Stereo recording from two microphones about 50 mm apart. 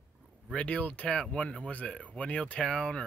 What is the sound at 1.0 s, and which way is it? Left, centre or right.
Speech, centre.